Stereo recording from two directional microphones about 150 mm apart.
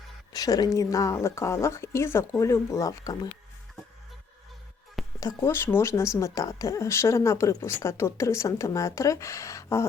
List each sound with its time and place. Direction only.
0.3 s speech: 25° left (ahead or behind)
5.2 s speech: 15° left (ahead or behind)